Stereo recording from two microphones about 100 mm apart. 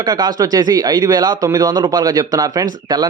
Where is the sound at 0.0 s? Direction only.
40° right (ahead or behind).